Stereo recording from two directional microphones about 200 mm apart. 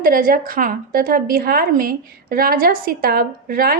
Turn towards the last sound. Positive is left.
turn(degrees=-50)  # may be behind; listen again after turning